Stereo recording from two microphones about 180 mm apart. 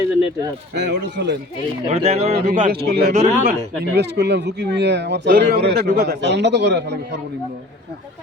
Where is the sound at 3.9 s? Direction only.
70° right (ahead or behind).